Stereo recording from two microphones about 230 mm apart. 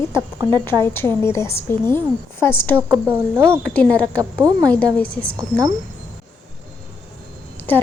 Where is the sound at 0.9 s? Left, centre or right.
Centre.